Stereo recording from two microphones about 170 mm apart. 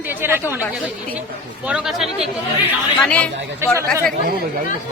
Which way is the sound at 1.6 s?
5° right (ahead or behind).